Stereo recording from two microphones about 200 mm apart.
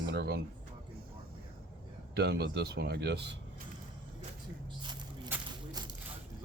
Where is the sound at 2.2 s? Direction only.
55° right (ahead or behind).